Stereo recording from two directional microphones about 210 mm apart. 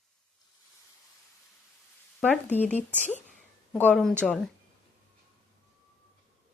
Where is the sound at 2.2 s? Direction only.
5° left (ahead or behind).